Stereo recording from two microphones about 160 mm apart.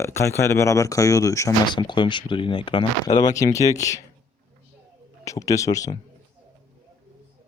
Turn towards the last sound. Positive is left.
turn(degrees=20)  # may be behind; listen again after turning